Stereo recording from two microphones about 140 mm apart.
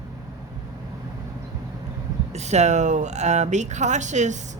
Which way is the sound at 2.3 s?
55° right (ahead or behind).